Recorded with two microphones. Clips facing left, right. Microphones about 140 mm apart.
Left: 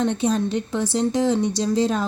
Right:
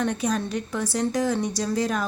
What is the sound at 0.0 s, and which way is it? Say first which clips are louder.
Speech: left 4 dB; 25° left (ahead or behind).